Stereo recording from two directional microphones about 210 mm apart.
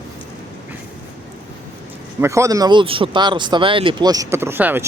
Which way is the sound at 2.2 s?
15° right (ahead or behind).